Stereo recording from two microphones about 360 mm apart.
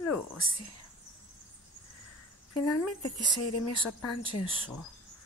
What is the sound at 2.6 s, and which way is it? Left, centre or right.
Speech, left.